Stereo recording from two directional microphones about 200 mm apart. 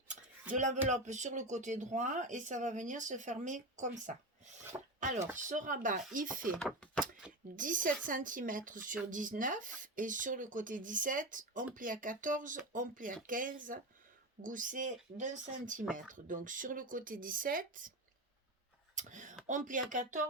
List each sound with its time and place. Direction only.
0.5 s speech: 35° right (ahead or behind)
4.7 s speech: 20° right (ahead or behind)
5.4 s speech: 40° right (ahead or behind)
6.6 s speech: 5° left (ahead or behind)
7.5 s speech: 40° right (ahead or behind)
18.9 s speech: 40° right (ahead or behind)